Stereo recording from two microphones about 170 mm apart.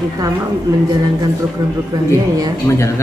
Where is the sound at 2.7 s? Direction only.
15° left (ahead or behind).